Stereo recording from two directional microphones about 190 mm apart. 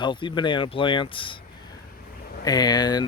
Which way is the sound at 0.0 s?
25° left (ahead or behind).